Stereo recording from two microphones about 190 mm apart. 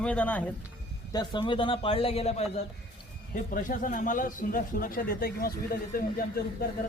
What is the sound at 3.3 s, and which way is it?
A man's voice, 45° left (ahead or behind).